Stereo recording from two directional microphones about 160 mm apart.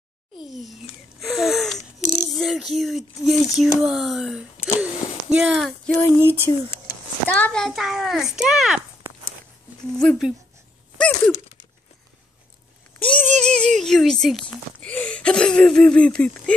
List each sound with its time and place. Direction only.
0.4 s a sound: centre (ahead or behind)
3.5 s a child's voice: centre (ahead or behind)
6.5 s speech: 25° left (ahead or behind)
7.2 s a child's voice: 10° left (ahead or behind)
9.9 s a child's voice: centre (ahead or behind)
11.0 s a sound: 5° left (ahead or behind)
13.0 s speech: 5° left (ahead or behind)